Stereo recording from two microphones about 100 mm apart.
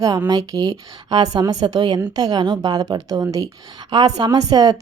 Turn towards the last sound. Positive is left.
turn(degrees=-40)  # may be behind; listen again after turning